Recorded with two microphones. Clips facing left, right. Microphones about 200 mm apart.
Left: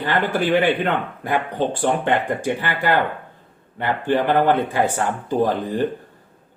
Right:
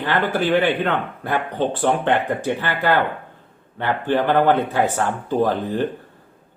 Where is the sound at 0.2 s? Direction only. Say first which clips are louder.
Even; 15° left (ahead or behind).